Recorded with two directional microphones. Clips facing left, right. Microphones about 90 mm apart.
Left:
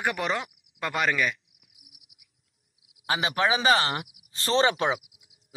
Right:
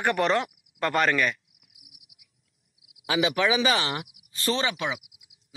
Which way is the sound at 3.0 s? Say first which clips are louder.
Right 1 dB; 35° left (ahead or behind).